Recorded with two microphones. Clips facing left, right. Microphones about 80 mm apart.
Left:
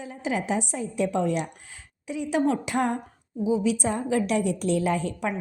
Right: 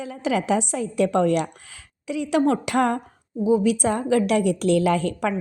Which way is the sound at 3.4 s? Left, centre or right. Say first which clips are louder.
Right 5 dB; right.